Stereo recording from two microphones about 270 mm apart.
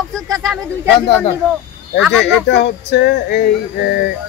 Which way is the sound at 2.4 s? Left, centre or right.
Left.